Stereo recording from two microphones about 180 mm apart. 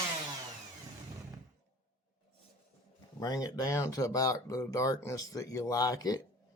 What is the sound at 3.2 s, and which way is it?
Speech, 20° left (ahead or behind).